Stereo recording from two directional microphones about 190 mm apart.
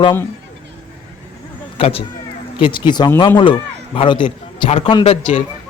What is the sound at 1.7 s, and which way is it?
Speech, 30° left (ahead or behind).